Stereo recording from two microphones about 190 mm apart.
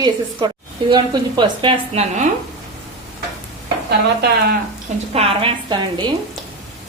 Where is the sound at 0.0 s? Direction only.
25° right (ahead or behind).